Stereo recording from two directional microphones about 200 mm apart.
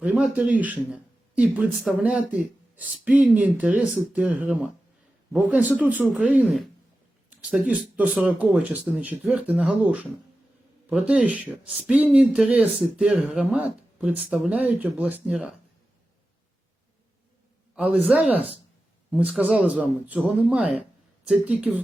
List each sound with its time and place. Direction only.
0.0 s speech: 5° right (ahead or behind)
17.7 s speech: 5° right (ahead or behind)